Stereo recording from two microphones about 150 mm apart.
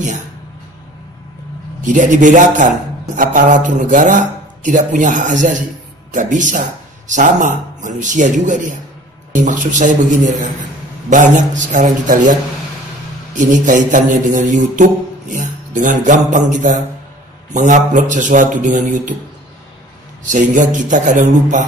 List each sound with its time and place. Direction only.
1.9 s mantra: 55° right (ahead or behind)
20.2 s mantra: 60° right (ahead or behind)